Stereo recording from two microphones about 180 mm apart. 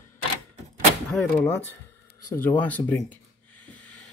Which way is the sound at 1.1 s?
5° left (ahead or behind).